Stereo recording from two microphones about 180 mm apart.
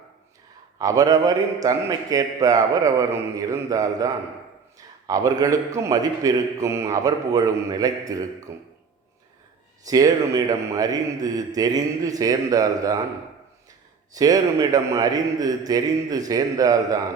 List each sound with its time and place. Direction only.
0.8 s a man's voice: 20° right (ahead or behind)
9.8 s a man's voice: 20° right (ahead or behind)
14.1 s a man's voice: 20° right (ahead or behind)